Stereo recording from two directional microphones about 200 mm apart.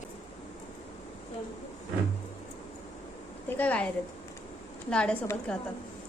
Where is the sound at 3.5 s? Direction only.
5° left (ahead or behind).